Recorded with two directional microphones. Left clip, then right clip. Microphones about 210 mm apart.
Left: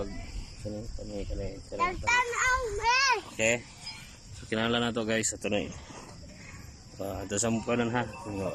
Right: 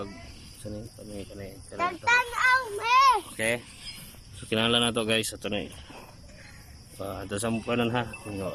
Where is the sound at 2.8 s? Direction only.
40° right (ahead or behind).